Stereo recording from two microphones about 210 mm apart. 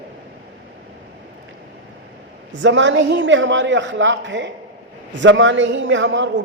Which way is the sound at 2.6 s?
60° right (ahead or behind).